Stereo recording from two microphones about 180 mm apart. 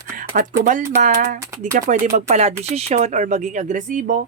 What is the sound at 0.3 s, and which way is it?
Speech, 50° right (ahead or behind).